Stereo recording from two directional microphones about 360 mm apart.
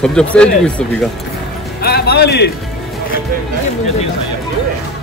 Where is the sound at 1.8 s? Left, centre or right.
Left.